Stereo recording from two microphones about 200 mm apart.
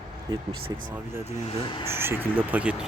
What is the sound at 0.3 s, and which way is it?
Speech, 20° right (ahead or behind).